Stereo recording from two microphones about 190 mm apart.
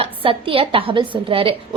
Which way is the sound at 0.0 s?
30° right (ahead or behind).